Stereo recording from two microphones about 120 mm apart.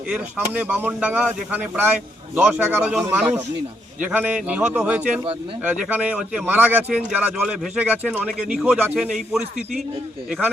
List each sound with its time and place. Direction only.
0.1 s speech: 15° right (ahead or behind)